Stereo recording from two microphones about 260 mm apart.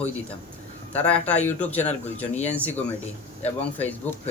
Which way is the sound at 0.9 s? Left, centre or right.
Centre.